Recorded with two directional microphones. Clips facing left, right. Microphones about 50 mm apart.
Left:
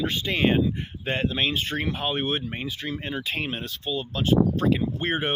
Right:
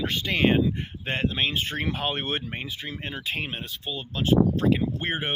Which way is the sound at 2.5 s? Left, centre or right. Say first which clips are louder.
Left 3 dB; right.